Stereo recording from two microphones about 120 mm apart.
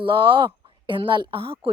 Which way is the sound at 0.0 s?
45° right (ahead or behind).